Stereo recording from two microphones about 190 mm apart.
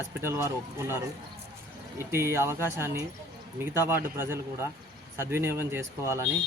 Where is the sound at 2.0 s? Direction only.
15° right (ahead or behind).